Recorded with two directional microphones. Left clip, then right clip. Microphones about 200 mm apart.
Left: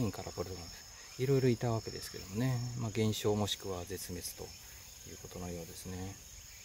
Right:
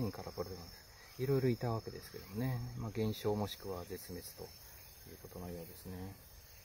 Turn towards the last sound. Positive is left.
turn(degrees=15)  # may be behind; listen again after turning